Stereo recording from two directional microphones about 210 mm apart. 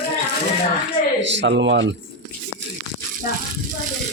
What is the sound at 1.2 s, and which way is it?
Speech, 60° right (ahead or behind).